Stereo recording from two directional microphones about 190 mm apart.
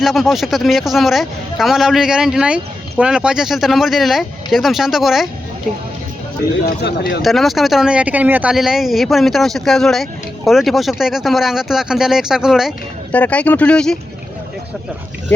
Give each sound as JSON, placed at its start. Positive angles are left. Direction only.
{"t": 0.0, "sound": "speech", "side_deg": 0}
{"t": 6.7, "sound": "speech", "side_deg": 60}
{"t": 7.2, "sound": "speech", "side_deg": 0}
{"t": 13.1, "sound": "speech", "side_deg": 10}